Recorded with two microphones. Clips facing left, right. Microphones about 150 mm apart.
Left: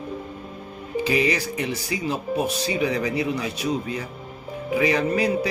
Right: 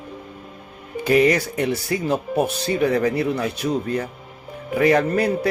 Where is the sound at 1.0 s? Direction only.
55° right (ahead or behind).